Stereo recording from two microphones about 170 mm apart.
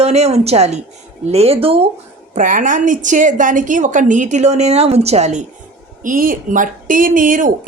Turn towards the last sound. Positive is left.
turn(degrees=-50)  # may be behind; listen again after turning